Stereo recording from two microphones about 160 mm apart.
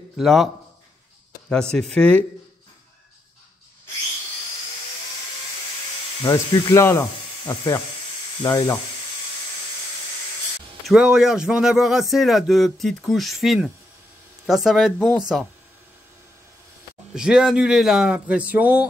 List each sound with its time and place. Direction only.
0.2 s a man's voice: centre (ahead or behind)
1.5 s a man's voice: 5° left (ahead or behind)
6.2 s speech: 20° left (ahead or behind)
10.8 s a man's voice: 5° right (ahead or behind)
17.1 s a man's voice: 5° right (ahead or behind)